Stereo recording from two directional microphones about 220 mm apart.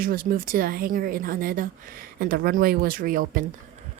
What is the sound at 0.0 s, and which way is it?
Speech, 40° right (ahead or behind).